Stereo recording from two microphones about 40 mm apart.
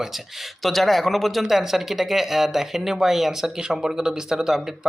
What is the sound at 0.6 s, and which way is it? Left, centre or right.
Speech, centre.